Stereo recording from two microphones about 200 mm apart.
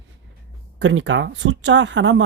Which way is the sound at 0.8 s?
65° right (ahead or behind).